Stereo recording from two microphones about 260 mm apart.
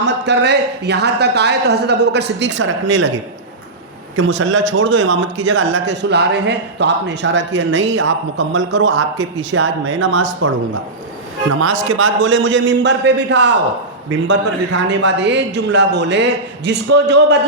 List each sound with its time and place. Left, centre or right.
0.0 s speech: right
4.2 s a man's voice: right
11.9 s a man's voice: right